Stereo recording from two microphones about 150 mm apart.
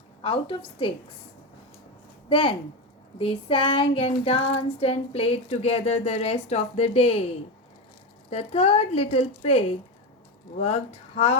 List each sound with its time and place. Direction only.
0.2 s child singing: 35° left (ahead or behind)
2.3 s child singing: 35° left (ahead or behind)
8.3 s speech: 45° left (ahead or behind)